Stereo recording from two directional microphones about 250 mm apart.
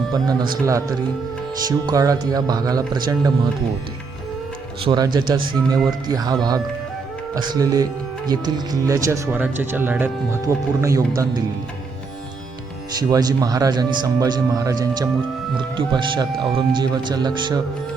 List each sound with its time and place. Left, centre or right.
0.1 s speech: centre
4.8 s speech: centre
13.0 s speech: centre